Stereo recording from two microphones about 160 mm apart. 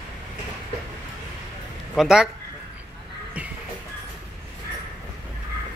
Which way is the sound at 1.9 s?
Centre (ahead or behind).